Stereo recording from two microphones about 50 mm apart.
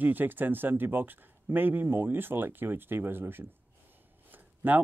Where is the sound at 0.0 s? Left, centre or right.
Right.